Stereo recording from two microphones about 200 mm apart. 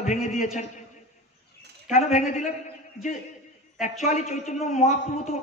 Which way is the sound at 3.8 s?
35° left (ahead or behind).